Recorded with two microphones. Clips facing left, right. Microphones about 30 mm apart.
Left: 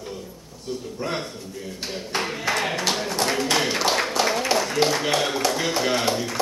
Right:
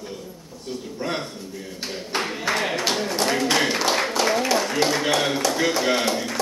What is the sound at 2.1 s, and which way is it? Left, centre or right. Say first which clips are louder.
A man's voice: right 1 dB; centre.